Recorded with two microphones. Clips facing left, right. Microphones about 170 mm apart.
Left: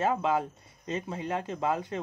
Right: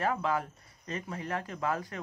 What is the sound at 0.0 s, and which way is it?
Speech, 20° left (ahead or behind).